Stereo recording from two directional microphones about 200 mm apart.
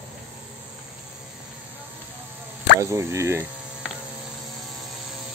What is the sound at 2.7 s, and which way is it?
Speech, 15° right (ahead or behind).